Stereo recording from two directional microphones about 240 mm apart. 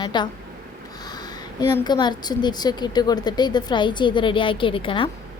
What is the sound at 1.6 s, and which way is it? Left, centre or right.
A woman's voice, centre.